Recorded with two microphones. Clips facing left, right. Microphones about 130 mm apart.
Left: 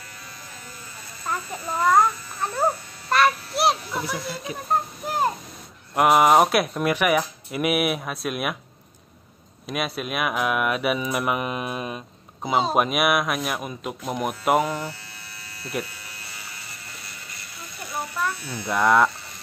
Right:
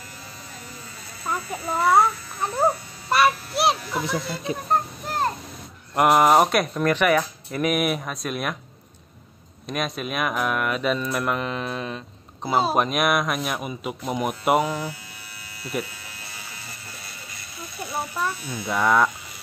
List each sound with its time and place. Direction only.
1.2 s a child's voice: 10° right (ahead or behind)
3.1 s music: 5° right (ahead or behind)
4.5 s speech: 30° right (ahead or behind)
5.0 s a sound: 15° left (ahead or behind)
5.9 s speech: centre (ahead or behind)
9.7 s speech: 5° left (ahead or behind)
12.4 s speech: 5° right (ahead or behind)
17.8 s electric shaver: 20° right (ahead or behind)
18.7 s speech: centre (ahead or behind)